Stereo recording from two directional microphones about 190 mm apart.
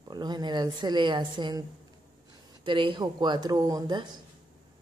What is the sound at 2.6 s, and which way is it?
A woman's voice, 25° right (ahead or behind).